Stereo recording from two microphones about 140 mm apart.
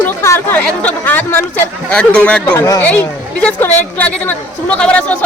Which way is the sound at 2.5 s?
25° left (ahead or behind).